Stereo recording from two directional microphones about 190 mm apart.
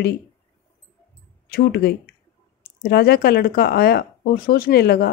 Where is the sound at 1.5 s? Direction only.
60° left (ahead or behind).